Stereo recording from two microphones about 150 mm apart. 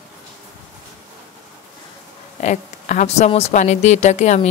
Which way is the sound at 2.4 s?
55° left (ahead or behind).